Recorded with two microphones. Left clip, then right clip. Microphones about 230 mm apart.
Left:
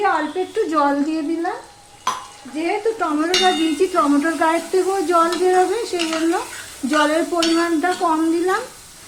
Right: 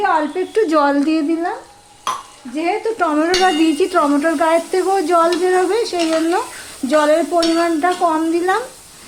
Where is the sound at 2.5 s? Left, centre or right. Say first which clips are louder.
Right 2 dB; right.